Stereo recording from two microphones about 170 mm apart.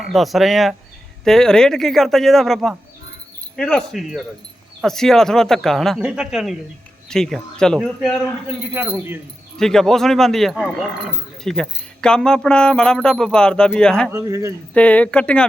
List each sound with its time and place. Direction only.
0.0 s speech: centre (ahead or behind)
8.7 s speech: 10° right (ahead or behind)
9.6 s speech: 5° left (ahead or behind)
14.1 s speech: 15° right (ahead or behind)
14.7 s speech: 5° left (ahead or behind)